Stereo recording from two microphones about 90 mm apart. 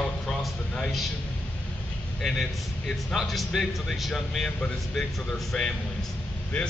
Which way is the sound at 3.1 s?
Centre (ahead or behind).